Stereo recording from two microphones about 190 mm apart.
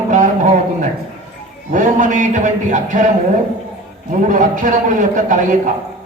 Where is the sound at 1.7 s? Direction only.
40° right (ahead or behind).